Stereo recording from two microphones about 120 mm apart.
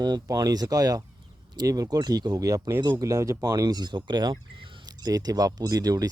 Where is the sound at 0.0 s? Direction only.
35° right (ahead or behind).